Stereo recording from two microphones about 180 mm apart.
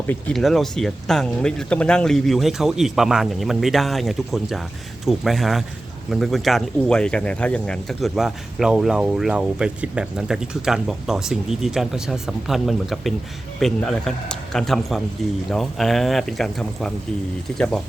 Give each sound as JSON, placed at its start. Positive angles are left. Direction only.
{"t": 0.1, "sound": "speech", "side_deg": 5}